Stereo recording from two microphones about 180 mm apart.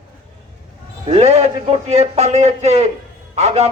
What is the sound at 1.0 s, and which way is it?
A man's voice, 35° right (ahead or behind).